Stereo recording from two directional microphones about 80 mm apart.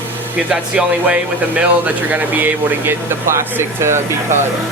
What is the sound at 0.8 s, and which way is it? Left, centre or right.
Speech, centre.